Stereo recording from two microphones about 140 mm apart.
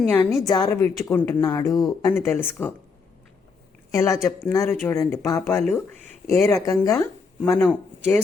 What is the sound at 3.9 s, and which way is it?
Speech, 20° left (ahead or behind).